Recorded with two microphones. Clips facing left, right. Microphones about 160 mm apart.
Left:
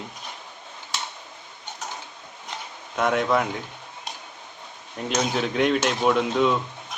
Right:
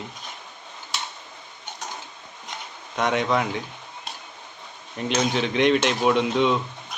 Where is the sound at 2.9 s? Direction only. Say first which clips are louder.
Left 1 dB; 5° left (ahead or behind).